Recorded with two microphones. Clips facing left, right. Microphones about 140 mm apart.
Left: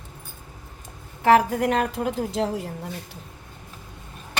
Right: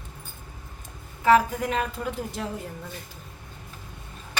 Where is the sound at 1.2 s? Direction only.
65° left (ahead or behind); by 2.7 s 90° left.